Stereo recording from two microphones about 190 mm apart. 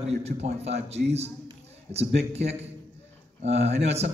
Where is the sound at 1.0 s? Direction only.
50° right (ahead or behind).